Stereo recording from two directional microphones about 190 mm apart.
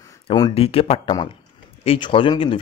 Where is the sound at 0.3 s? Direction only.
25° left (ahead or behind).